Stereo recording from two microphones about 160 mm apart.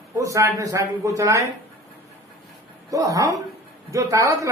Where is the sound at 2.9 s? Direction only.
20° right (ahead or behind).